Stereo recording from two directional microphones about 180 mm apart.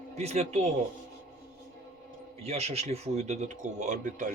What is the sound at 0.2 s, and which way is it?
Speech, 35° right (ahead or behind).